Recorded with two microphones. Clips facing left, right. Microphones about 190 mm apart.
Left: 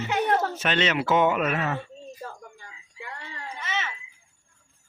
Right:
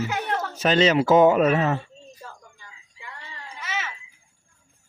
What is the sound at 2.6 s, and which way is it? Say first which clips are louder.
Screaming: left 4 dB; 50° left (ahead or behind).